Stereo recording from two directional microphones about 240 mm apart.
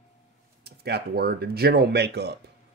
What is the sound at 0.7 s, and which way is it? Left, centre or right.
Speech, right.